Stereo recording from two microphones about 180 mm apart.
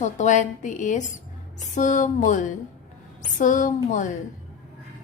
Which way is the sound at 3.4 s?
45° left (ahead or behind).